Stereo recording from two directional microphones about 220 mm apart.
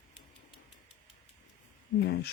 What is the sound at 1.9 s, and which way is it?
Speech, 45° left (ahead or behind).